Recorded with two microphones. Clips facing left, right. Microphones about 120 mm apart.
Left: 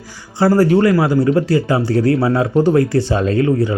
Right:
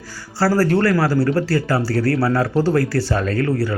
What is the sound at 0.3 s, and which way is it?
Speech, 15° left (ahead or behind).